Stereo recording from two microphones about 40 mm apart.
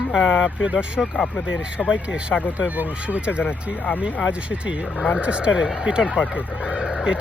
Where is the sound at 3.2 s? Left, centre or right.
Right.